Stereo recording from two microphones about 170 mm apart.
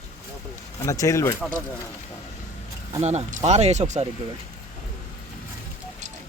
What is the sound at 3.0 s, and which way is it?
Speech, 40° right (ahead or behind).